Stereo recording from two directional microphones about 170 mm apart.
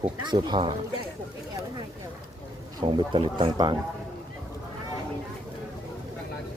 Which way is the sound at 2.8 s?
30° right (ahead or behind).